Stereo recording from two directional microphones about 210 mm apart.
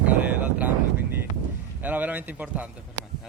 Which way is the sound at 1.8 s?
10° right (ahead or behind).